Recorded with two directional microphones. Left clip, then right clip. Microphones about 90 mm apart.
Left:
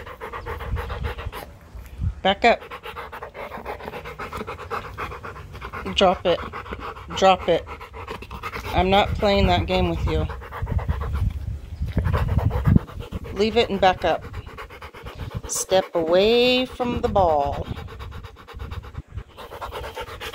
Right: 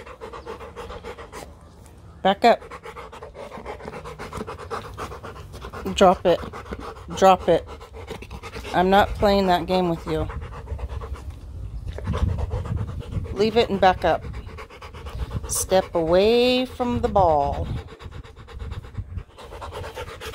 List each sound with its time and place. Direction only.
0.2 s pant: 30° right (ahead or behind)
2.2 s speech: 25° right (ahead or behind)
2.7 s pant: 45° right (ahead or behind)
3.2 s pant: 25° right (ahead or behind)
4.5 s pant: 65° right (ahead or behind); by 6.8 s 45° right (ahead or behind)
7.5 s speech: 35° right (ahead or behind)
8.5 s dog: centre (ahead or behind)
8.7 s speech: 30° right (ahead or behind); by 11.1 s 15° right (ahead or behind)
12.1 s a sound: 10° right (ahead or behind)
13.4 s speech: 25° right (ahead or behind)
15.4 s scratch: 25° right (ahead or behind)
15.8 s speech: 15° right (ahead or behind)
19.5 s pant: centre (ahead or behind)